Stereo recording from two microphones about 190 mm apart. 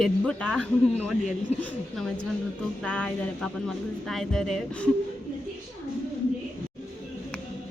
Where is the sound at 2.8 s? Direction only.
5° left (ahead or behind).